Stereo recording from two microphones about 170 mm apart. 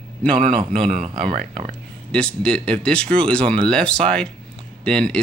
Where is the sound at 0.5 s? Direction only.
35° right (ahead or behind).